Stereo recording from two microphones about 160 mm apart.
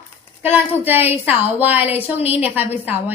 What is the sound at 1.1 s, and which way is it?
A woman's voice, 10° right (ahead or behind).